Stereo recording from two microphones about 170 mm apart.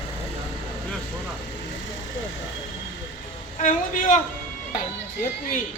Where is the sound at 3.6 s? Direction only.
45° left (ahead or behind).